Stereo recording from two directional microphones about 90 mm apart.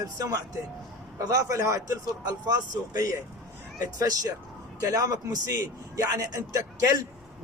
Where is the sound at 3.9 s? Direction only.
45° right (ahead or behind).